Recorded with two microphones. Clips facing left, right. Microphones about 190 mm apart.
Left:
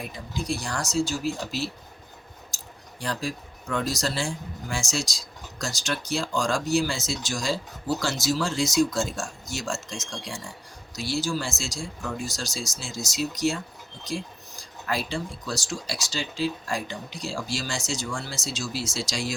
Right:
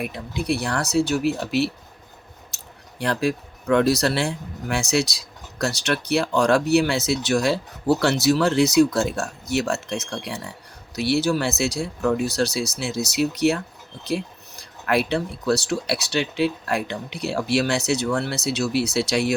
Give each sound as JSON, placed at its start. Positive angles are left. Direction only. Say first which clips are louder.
{"t": 0.0, "sound": "speech", "louder": "right 6 dB", "side_deg": -65}
{"t": 3.0, "sound": "speech", "louder": "right 8 dB", "side_deg": -65}